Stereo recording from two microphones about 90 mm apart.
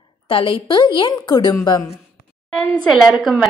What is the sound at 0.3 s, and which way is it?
A woman's voice, 75° left (ahead or behind).